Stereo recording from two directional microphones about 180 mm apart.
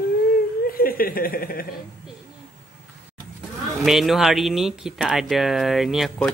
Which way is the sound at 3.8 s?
Centre (ahead or behind).